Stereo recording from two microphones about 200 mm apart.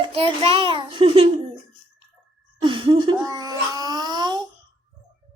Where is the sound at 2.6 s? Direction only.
25° right (ahead or behind).